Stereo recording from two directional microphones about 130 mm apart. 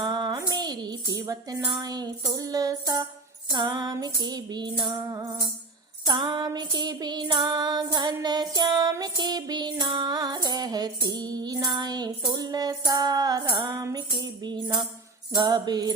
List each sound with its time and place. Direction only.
0.0 s music: 35° right (ahead or behind)
6.1 s music: 35° right (ahead or behind)